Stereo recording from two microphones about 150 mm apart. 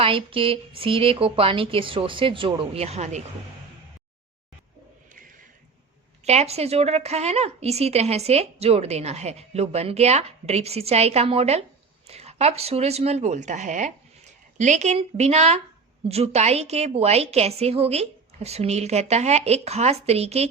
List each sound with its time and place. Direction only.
0.0 s speech: 35° right (ahead or behind)
6.2 s a woman's voice: 45° right (ahead or behind)